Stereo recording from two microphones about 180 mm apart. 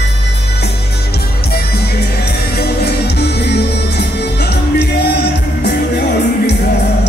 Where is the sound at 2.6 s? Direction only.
65° left (ahead or behind).